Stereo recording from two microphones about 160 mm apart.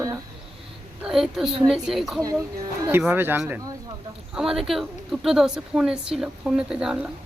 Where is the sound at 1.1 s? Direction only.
Centre (ahead or behind).